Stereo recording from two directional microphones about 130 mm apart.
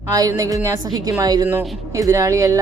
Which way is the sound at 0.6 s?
30° right (ahead or behind).